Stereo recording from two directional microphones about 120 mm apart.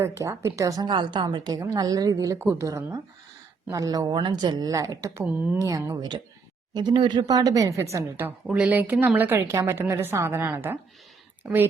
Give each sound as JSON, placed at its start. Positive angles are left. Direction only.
{"t": 0.0, "sound": "a woman's voice", "side_deg": -25}
{"t": 8.4, "sound": "a woman's voice", "side_deg": -10}